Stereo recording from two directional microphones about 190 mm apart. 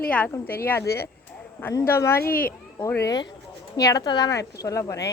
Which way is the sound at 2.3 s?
50° left (ahead or behind).